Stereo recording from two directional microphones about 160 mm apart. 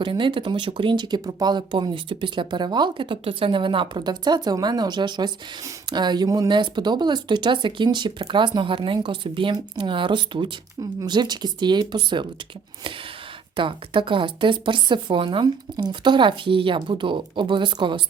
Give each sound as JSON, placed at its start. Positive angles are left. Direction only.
{"t": 0.0, "sound": "speech", "side_deg": -30}
{"t": 13.6, "sound": "a woman's voice", "side_deg": -30}